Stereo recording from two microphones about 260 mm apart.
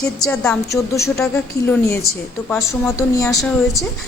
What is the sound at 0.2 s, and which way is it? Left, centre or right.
A woman's voice, centre.